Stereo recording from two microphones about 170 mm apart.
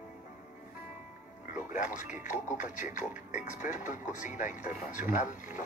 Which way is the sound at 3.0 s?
10° right (ahead or behind).